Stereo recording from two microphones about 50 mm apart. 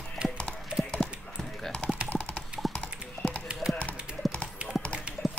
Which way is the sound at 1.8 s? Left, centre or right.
Centre.